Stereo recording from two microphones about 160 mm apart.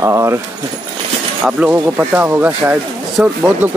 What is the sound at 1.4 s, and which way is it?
Speech, 10° right (ahead or behind).